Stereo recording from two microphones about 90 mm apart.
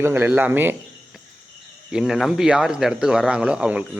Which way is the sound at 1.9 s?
5° right (ahead or behind).